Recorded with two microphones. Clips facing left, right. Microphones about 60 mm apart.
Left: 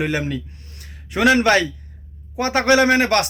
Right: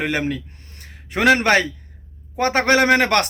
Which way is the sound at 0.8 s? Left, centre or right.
Right.